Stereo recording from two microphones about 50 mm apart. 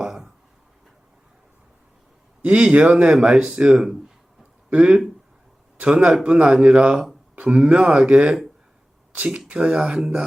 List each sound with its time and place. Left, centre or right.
2.4 s speech: right
2.9 s speech: centre